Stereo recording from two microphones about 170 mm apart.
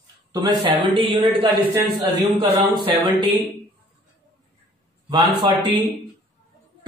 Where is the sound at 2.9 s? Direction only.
30° right (ahead or behind).